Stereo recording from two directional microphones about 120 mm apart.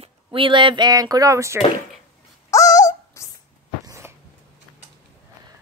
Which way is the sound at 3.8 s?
25° right (ahead or behind).